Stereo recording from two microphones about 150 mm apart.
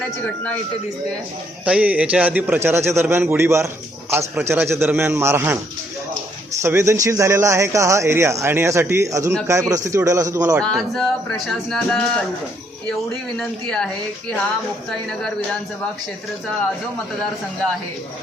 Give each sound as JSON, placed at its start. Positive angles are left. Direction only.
{"t": 1.6, "sound": "a man's voice", "side_deg": -10}
{"t": 6.6, "sound": "speech", "side_deg": -20}
{"t": 10.6, "sound": "speech", "side_deg": 5}
{"t": 13.4, "sound": "speech", "side_deg": 5}